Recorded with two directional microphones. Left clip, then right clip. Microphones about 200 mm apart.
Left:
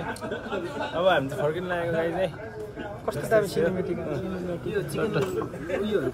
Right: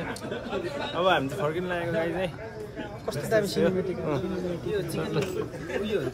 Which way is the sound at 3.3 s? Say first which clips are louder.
Left 2 dB; 40° left (ahead or behind).